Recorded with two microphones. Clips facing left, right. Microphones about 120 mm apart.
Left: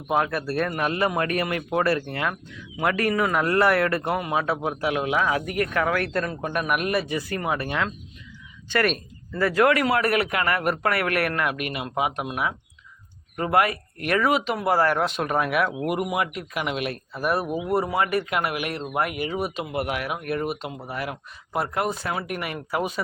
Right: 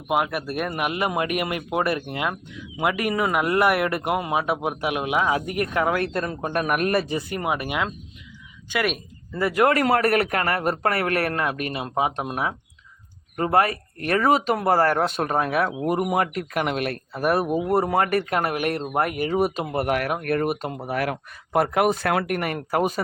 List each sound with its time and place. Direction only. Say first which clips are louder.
0.1 s speech: even; 15° right (ahead or behind)
6.5 s speech: right 3 dB; 45° right (ahead or behind)
7.1 s speech: right 1 dB; 20° right (ahead or behind)
9.8 s a man's voice: right 2 dB; 45° right (ahead or behind)
16.0 s speech: right 3 dB; 45° right (ahead or behind)
20.8 s speech: right 8 dB; 65° right (ahead or behind)
22.4 s speech: right 4 dB; 50° right (ahead or behind)